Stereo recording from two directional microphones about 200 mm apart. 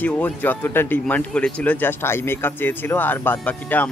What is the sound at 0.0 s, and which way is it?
Speech, 10° left (ahead or behind).